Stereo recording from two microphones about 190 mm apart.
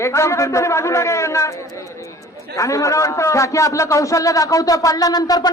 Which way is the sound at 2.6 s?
15° left (ahead or behind).